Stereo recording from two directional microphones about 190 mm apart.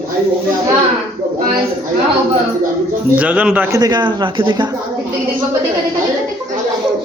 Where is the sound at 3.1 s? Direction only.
5° right (ahead or behind).